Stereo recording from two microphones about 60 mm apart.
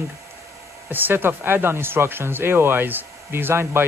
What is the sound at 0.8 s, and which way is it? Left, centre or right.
Speech, right.